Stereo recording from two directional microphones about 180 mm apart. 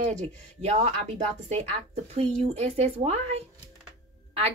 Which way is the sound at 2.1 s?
35° right (ahead or behind).